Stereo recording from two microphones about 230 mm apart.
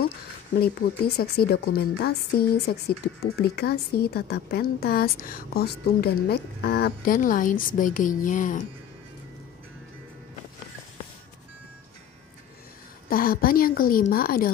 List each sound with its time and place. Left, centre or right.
0.6 s a woman's voice: left
13.1 s a woman's voice: left